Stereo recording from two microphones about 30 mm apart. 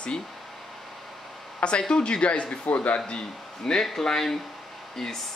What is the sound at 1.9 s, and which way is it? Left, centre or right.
Speech, left.